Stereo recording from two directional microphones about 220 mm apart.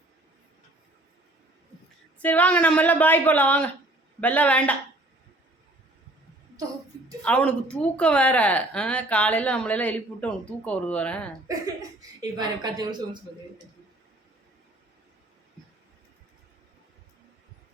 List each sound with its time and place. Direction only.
2.1 s speech: 5° left (ahead or behind)
7.2 s a woman's voice: 5° left (ahead or behind)
11.4 s speech: 15° right (ahead or behind)